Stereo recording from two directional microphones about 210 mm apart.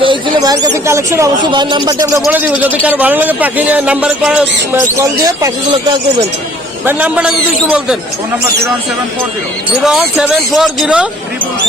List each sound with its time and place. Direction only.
0.0 s a sound: 20° right (ahead or behind)
0.9 s speech: 15° right (ahead or behind)
6.8 s speech: 5° right (ahead or behind)
9.8 s speech: 5° right (ahead or behind)